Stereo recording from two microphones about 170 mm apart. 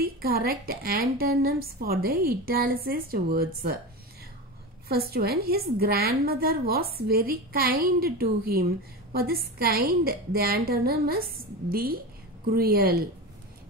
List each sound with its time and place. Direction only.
0.0 s a woman's voice: 65° right (ahead or behind)
4.8 s a woman's voice: 65° right (ahead or behind)